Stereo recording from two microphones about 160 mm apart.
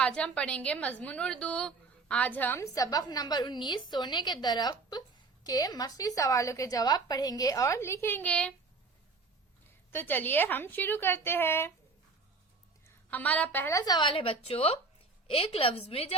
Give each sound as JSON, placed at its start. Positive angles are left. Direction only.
{"t": 0.0, "sound": "a woman's voice", "side_deg": 5}
{"t": 9.6, "sound": "a woman's voice", "side_deg": 15}
{"t": 12.8, "sound": "a woman's voice", "side_deg": 10}